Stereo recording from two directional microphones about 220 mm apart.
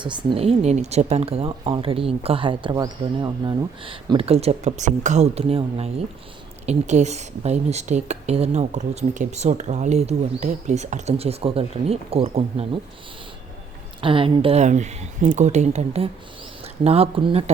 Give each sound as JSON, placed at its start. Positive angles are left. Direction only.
{"t": 0.0, "sound": "speech", "side_deg": -20}
{"t": 14.0, "sound": "speech", "side_deg": -25}